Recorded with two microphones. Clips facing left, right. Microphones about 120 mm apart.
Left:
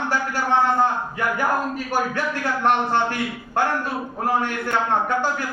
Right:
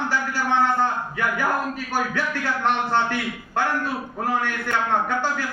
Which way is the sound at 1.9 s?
15° left (ahead or behind).